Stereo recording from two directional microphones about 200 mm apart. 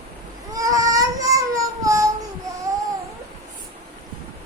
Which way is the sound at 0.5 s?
15° right (ahead or behind).